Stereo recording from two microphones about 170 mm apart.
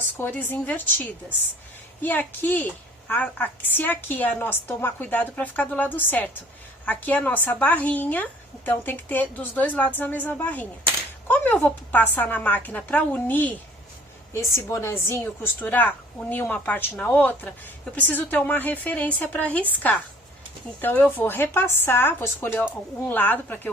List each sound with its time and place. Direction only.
0.2 s a woman's voice: 10° left (ahead or behind)
2.0 s a woman's voice: 10° left (ahead or behind)